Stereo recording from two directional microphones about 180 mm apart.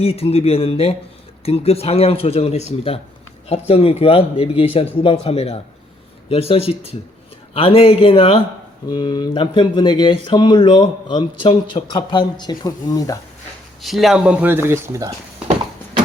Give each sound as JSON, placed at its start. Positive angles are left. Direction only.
{"t": 0.0, "sound": "speech", "side_deg": 35}
{"t": 13.8, "sound": "speech", "side_deg": 0}